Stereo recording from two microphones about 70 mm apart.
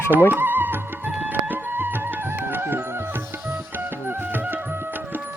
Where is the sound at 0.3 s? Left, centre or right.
Right.